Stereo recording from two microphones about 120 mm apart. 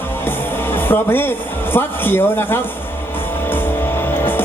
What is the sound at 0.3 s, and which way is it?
A man's voice, 20° left (ahead or behind).